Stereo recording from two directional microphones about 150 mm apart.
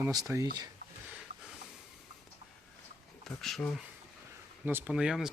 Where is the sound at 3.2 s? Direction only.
Centre (ahead or behind).